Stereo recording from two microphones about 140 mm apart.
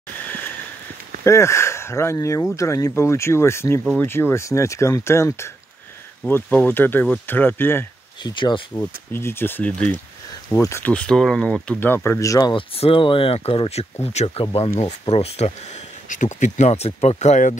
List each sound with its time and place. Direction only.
1.2 s speech: 20° left (ahead or behind)
8.2 s speech: 35° left (ahead or behind)
9.1 s speech: 15° left (ahead or behind)
10.5 s speech: 20° left (ahead or behind)
12.5 s speech: 40° left (ahead or behind)